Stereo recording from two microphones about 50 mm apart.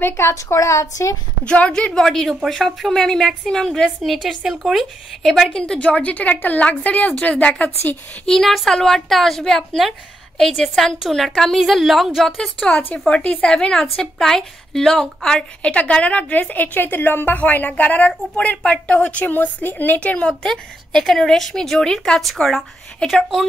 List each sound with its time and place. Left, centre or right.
0.0 s a woman's voice: left
1.4 s a woman's voice: left
2.0 s a woman's voice: centre
4.0 s a woman's voice: centre
5.5 s a woman's voice: centre
5.8 s a woman's voice: left
8.3 s a woman's voice: centre
11.0 s a woman's voice: centre
12.6 s a woman's voice: left
15.6 s a woman's voice: left
20.0 s a woman's voice: left
20.2 s a woman's voice: centre